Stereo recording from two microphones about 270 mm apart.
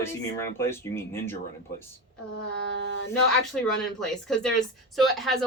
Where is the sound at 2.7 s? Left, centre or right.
Right.